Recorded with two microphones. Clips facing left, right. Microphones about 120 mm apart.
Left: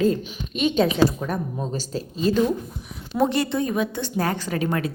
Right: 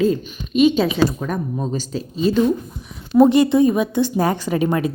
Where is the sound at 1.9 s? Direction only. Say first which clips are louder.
Right 2 dB; 45° left (ahead or behind).